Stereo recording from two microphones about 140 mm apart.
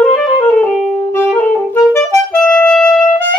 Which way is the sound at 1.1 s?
15° left (ahead or behind).